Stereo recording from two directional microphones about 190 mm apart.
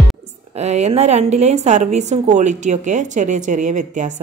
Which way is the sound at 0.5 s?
35° right (ahead or behind).